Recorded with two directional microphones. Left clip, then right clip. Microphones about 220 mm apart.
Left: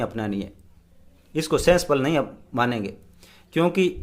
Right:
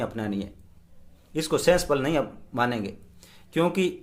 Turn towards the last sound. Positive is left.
turn(degrees=15)  # may be behind; listen again after turning